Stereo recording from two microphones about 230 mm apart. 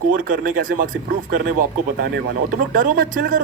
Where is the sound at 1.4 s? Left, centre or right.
Right.